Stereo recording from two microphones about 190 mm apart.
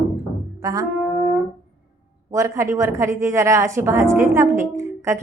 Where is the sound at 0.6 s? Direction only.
20° right (ahead or behind).